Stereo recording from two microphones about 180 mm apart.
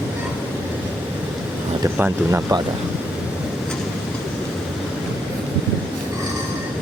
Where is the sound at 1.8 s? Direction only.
10° right (ahead or behind).